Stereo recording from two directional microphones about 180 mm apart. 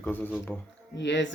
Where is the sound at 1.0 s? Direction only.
80° left.